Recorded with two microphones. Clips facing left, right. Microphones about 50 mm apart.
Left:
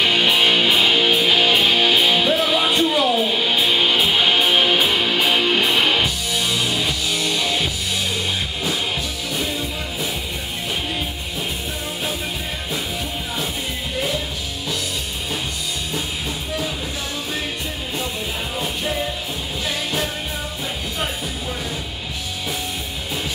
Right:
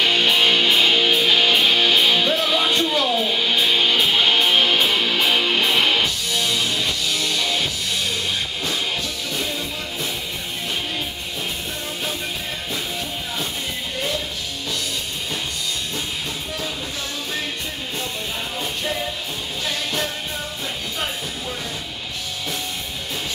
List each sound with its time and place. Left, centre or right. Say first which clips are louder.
0.0 s music: left 1 dB; centre
9.3 s music: left 3 dB; centre